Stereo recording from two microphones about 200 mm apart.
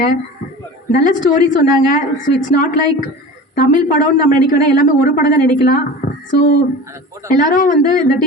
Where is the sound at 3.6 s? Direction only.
40° left (ahead or behind).